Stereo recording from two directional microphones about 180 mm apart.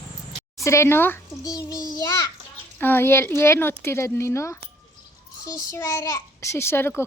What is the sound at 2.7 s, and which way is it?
A woman's voice, 10° left (ahead or behind).